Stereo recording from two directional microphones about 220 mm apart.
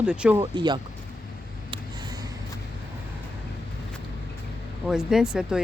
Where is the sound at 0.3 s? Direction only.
20° right (ahead or behind).